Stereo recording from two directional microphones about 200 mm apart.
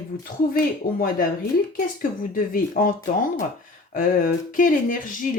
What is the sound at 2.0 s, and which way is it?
Speech, 45° left (ahead or behind).